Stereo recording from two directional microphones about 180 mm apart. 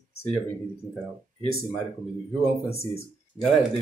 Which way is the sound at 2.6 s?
35° left (ahead or behind).